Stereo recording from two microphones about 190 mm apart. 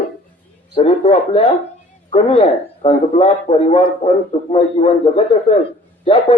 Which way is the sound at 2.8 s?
30° left (ahead or behind).